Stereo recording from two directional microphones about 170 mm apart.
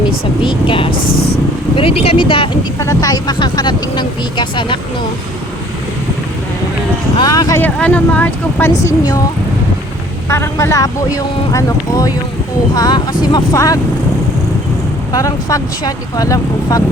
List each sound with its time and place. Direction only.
0.4 s speech: 30° left (ahead or behind)
1.0 s speech: 70° left (ahead or behind)
1.7 s speech: 35° left (ahead or behind)
2.7 s speech: 20° left (ahead or behind)
7.2 s speech: 20° left (ahead or behind)
7.6 s speech: 10° left (ahead or behind)
8.8 s speech: 20° left (ahead or behind)
10.2 s speech: 15° left (ahead or behind)
15.1 s speech: 20° left (ahead or behind)